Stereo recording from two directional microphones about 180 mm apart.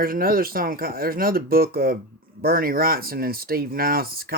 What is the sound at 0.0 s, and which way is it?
Speech, 50° right (ahead or behind).